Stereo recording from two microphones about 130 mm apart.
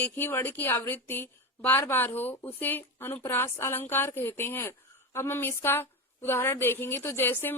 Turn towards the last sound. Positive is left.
turn(degrees=15)  # may be behind; listen again after turning